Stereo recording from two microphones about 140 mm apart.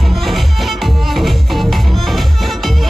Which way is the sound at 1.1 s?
Centre (ahead or behind).